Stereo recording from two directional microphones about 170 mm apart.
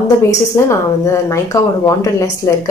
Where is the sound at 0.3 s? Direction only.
20° left (ahead or behind).